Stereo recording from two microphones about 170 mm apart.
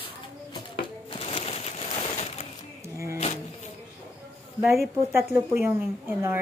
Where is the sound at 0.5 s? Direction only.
30° left (ahead or behind).